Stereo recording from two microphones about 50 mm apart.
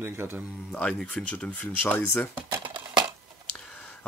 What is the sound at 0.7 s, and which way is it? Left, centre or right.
Speech, left.